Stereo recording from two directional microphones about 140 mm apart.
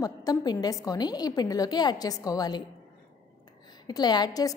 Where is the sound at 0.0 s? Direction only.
25° left (ahead or behind).